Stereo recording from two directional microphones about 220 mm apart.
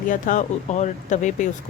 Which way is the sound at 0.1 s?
35° left (ahead or behind).